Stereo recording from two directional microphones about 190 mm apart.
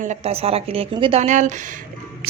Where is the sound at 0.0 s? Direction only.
35° right (ahead or behind).